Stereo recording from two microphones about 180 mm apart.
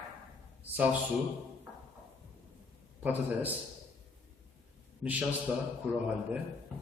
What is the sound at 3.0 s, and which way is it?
Speech, 10° right (ahead or behind).